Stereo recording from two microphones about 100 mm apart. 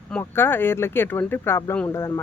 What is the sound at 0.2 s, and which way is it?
Speech, 20° left (ahead or behind).